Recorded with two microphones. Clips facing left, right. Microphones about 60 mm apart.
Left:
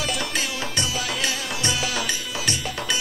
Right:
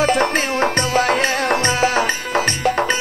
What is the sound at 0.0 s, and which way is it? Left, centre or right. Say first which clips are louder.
Music: right 11 dB; right.